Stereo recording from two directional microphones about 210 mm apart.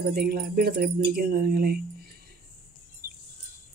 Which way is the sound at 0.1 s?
50° right (ahead or behind).